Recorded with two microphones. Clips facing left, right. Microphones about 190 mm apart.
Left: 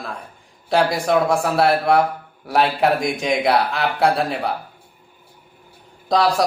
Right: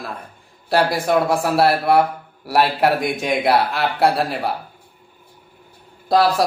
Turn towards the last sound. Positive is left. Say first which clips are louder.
# right 2 dB
turn(degrees=0)  # may be behind; listen again after turning